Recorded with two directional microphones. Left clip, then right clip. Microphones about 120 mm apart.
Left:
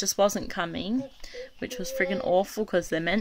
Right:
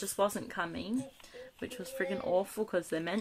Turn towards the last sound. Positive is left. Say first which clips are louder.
# left 8 dB
turn(degrees=45)  # may be behind; listen again after turning